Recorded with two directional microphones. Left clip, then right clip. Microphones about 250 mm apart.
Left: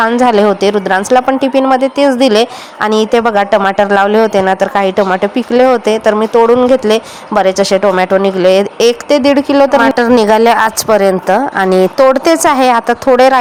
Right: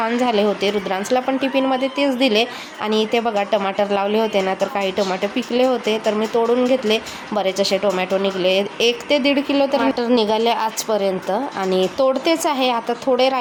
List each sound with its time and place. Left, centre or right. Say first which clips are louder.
0.0 s speech: left 10 dB; left